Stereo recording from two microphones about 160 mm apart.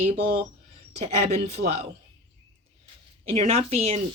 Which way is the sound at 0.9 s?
45° right (ahead or behind).